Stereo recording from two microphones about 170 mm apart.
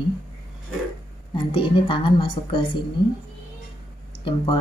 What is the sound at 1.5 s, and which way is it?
A woman's voice, 30° left (ahead or behind).